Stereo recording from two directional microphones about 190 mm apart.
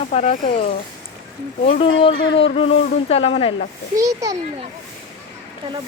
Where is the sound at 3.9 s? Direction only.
15° right (ahead or behind).